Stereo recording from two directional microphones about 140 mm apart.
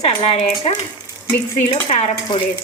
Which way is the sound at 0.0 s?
50° left (ahead or behind).